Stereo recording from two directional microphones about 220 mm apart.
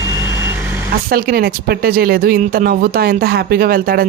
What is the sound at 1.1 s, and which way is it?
Speech, 45° right (ahead or behind).